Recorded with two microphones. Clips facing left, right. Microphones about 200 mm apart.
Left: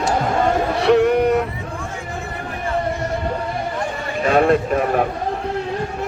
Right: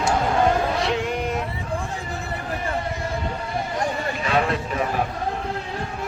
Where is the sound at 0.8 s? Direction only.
60° left (ahead or behind).